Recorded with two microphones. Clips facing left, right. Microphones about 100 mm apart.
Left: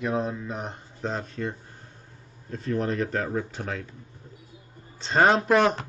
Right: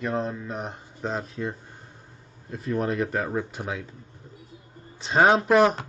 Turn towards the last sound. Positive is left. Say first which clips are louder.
# right 2 dB
turn(degrees=-5)  # may be behind; listen again after turning